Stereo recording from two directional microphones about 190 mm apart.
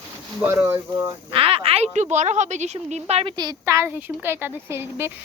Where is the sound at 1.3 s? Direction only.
30° right (ahead or behind).